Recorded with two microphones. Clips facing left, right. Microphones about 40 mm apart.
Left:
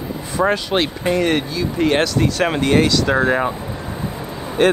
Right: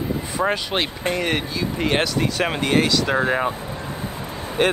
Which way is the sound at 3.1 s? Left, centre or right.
Centre.